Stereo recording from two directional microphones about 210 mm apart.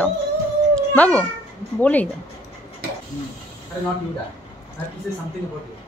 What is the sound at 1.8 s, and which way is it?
Speech, 10° left (ahead or behind).